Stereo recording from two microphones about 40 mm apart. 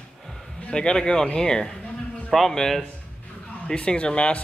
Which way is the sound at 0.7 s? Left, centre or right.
Left.